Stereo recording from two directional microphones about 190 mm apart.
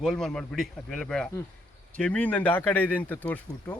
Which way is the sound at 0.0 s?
Centre (ahead or behind).